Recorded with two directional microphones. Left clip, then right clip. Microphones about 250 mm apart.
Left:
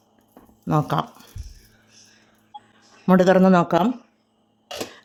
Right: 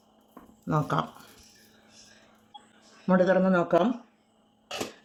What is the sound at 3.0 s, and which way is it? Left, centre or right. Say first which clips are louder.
Speech: left 7 dB; left.